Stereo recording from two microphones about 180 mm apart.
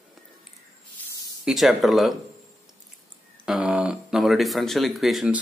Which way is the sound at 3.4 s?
5° right (ahead or behind).